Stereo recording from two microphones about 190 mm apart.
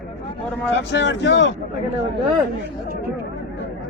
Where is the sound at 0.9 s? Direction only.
70° left (ahead or behind).